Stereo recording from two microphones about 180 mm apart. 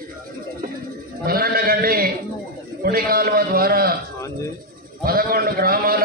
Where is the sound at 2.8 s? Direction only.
55° right (ahead or behind).